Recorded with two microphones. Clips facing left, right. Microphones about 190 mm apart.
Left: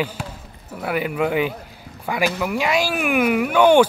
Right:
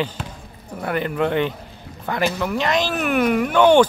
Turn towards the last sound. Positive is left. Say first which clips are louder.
# even
turn(degrees=10)  # may be behind; listen again after turning